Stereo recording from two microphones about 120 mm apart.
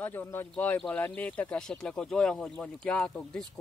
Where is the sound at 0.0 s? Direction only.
15° left (ahead or behind).